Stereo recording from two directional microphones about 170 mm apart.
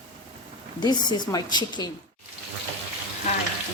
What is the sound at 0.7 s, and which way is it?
Speech, 25° left (ahead or behind).